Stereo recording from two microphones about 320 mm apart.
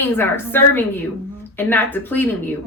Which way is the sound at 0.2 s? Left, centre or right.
Centre.